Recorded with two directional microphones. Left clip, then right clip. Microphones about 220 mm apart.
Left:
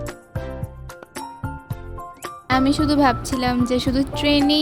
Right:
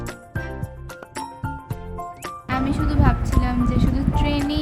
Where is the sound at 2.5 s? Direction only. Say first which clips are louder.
Left 6 dB; 35° left (ahead or behind).